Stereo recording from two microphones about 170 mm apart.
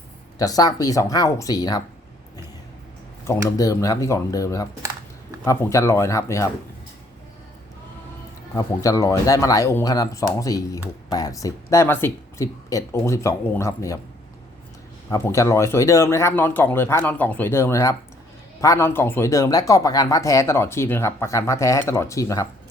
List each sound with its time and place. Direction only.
0.3 s speech: 20° left (ahead or behind)
3.2 s speech: 20° left (ahead or behind)
8.5 s speech: 20° left (ahead or behind)
15.1 s speech: 15° left (ahead or behind)